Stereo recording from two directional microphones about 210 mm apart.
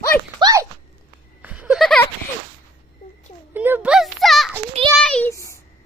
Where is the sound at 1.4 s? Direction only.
5° right (ahead or behind).